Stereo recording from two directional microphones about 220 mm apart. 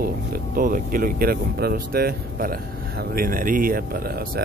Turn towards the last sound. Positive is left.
turn(degrees=-45)  # may be behind; listen again after turning